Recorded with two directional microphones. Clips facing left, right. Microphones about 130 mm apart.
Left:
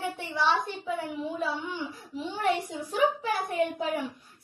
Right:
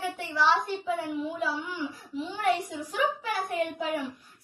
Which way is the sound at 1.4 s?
30° left (ahead or behind).